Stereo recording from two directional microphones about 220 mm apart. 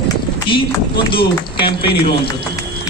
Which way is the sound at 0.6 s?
20° left (ahead or behind).